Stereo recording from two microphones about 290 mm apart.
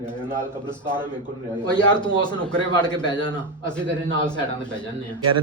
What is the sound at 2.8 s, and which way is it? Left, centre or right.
Speech, centre.